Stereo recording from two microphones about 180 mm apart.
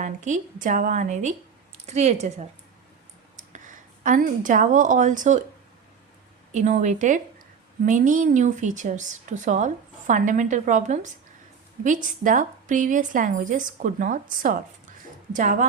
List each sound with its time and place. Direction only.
0.0 s speech: 45° right (ahead or behind)
3.3 s speech: 45° right (ahead or behind)
6.5 s speech: 40° right (ahead or behind)